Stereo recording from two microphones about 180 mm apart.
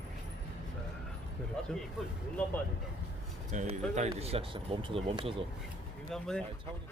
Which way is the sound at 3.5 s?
40° right (ahead or behind).